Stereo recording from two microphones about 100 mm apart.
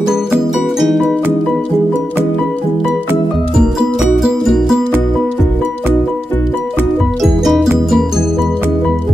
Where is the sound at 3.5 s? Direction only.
5° right (ahead or behind).